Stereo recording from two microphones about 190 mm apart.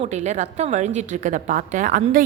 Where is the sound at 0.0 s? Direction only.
35° right (ahead or behind).